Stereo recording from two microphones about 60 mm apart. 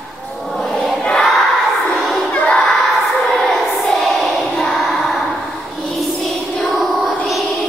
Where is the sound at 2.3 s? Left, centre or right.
Centre.